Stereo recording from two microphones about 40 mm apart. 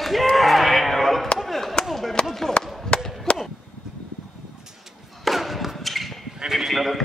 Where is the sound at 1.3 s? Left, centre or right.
Centre.